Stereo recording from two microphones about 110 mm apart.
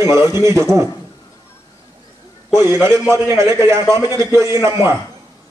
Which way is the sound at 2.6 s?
25° right (ahead or behind).